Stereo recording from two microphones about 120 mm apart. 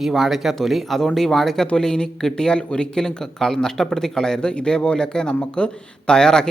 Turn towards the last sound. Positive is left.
turn(degrees=5)  # may be behind; listen again after turning